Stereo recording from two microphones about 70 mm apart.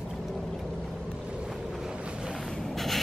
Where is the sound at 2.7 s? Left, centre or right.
Centre.